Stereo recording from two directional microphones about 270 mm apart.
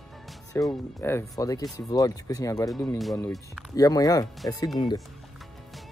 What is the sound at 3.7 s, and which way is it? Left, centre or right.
Speech, centre.